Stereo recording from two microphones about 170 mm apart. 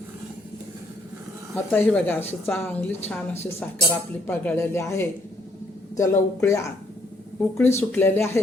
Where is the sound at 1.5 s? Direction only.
10° left (ahead or behind).